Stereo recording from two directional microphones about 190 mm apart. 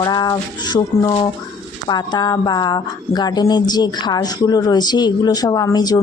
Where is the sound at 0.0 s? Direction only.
20° left (ahead or behind).